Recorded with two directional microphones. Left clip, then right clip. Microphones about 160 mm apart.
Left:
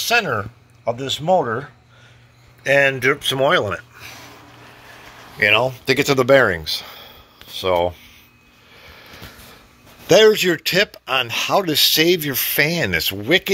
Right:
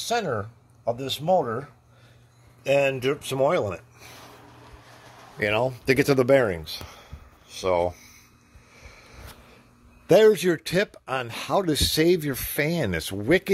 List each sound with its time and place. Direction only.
0.1 s speech: centre (ahead or behind)
2.6 s speech: 10° right (ahead or behind)
5.4 s speech: 25° right (ahead or behind)
5.9 s speech: 35° right (ahead or behind)
6.2 s speech: 15° right (ahead or behind)
10.0 s speech: 20° right (ahead or behind)